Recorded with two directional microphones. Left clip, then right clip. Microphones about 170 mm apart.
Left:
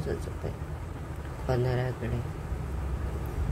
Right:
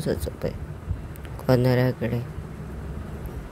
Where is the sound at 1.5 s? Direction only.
60° right (ahead or behind).